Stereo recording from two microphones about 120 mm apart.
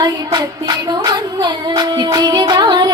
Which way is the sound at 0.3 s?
35° right (ahead or behind).